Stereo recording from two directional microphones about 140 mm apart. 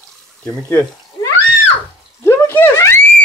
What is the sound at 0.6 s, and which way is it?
Speech, 20° left (ahead or behind).